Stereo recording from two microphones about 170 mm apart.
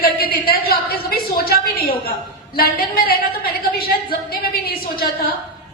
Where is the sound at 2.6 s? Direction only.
60° left (ahead or behind).